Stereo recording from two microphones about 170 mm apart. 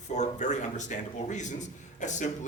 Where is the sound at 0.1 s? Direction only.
45° left (ahead or behind).